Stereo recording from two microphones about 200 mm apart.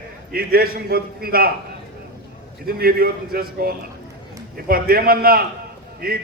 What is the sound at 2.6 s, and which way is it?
A man's voice, 50° right (ahead or behind).